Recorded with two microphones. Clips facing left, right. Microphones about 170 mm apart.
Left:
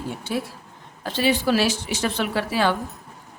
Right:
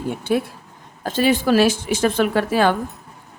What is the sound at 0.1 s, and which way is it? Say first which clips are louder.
A woman's voice: right 8 dB; 55° right (ahead or behind).